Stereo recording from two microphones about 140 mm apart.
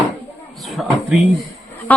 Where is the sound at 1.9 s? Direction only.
10° left (ahead or behind).